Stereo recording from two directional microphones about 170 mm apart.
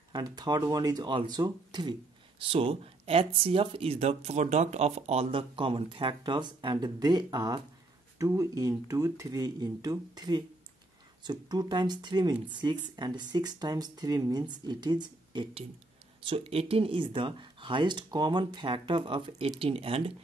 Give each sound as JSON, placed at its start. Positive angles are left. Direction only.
{"t": 0.1, "sound": "speech", "side_deg": -25}